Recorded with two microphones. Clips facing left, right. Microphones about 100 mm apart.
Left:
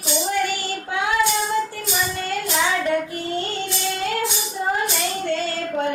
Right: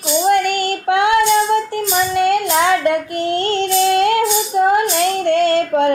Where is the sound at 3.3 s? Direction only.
75° right (ahead or behind).